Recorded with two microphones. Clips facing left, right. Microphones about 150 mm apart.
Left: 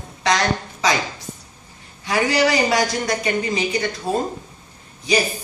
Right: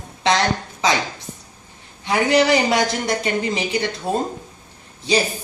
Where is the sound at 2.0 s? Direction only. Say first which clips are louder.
Right 2 dB; 25° right (ahead or behind).